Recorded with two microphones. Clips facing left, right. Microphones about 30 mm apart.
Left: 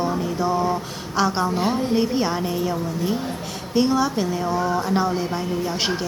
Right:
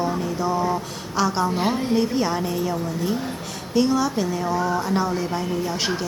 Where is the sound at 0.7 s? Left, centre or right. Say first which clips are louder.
Left 1 dB; centre.